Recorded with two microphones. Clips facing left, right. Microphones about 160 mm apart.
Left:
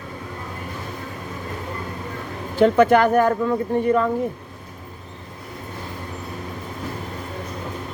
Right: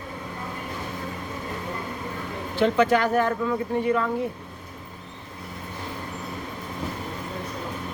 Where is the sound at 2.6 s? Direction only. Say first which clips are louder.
Left 6 dB; 50° left (ahead or behind).